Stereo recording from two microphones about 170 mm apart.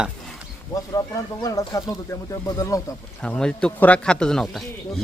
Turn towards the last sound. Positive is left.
turn(degrees=0)  # may be behind; listen again after turning